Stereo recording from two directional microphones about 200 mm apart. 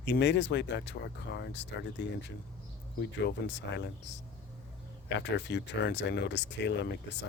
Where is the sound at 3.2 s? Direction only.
60° left (ahead or behind).